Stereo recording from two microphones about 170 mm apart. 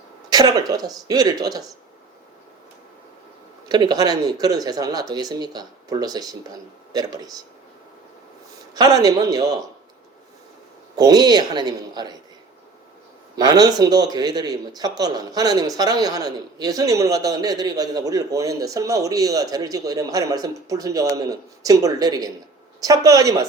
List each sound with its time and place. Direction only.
0.3 s a man's voice: 20° right (ahead or behind)
3.7 s a man's voice: 25° right (ahead or behind)
8.7 s a man's voice: 20° right (ahead or behind)
10.9 s a man's voice: 25° right (ahead or behind)
13.3 s a man's voice: 25° right (ahead or behind)